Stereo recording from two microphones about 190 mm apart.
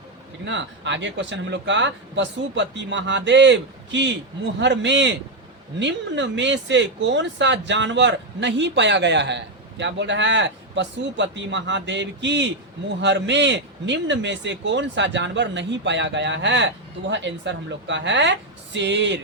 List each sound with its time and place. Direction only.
0.4 s speech: 70° right (ahead or behind)